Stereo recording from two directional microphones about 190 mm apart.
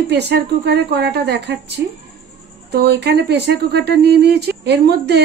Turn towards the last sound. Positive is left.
turn(degrees=-60)  # may be behind; listen again after turning